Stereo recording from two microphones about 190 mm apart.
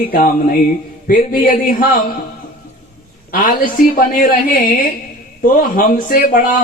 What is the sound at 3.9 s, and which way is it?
Speech, 45° left (ahead or behind).